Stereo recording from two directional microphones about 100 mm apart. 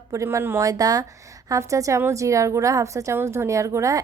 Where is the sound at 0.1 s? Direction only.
30° right (ahead or behind).